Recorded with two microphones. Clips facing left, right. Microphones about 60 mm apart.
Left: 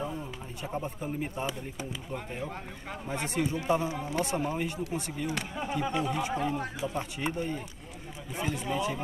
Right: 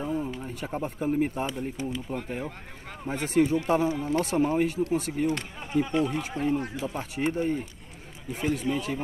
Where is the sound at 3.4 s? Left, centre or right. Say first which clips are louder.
Right 6 dB; right.